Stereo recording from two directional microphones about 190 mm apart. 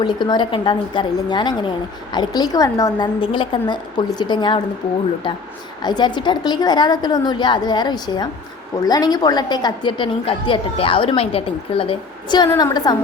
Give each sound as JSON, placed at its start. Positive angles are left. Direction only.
{"t": 0.0, "sound": "a woman's voice", "side_deg": 25}
{"t": 5.8, "sound": "a woman's voice", "side_deg": 20}